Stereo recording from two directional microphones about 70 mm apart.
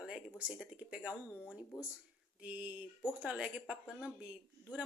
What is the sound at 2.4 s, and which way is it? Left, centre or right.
A woman's voice, centre.